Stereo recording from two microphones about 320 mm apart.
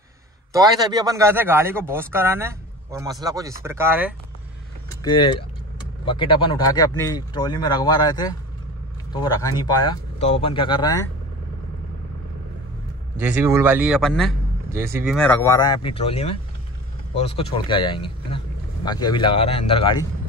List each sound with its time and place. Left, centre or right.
0.5 s a man's voice: centre
5.0 s speech: centre
13.2 s a man's voice: centre
15.1 s speech: centre